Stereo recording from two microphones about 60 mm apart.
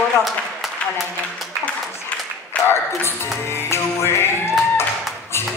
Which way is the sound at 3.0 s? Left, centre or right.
Left.